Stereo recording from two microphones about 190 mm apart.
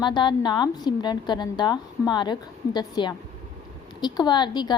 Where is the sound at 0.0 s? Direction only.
25° left (ahead or behind).